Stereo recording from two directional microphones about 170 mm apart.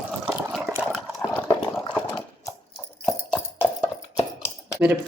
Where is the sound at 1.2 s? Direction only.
15° left (ahead or behind).